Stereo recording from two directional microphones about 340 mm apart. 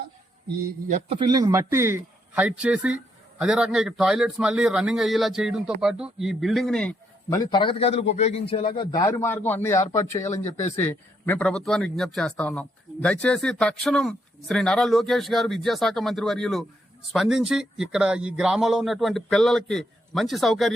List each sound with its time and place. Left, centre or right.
0.9 s a man's voice: centre